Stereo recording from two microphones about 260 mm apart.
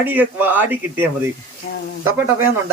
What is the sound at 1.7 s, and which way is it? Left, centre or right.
Speech, left.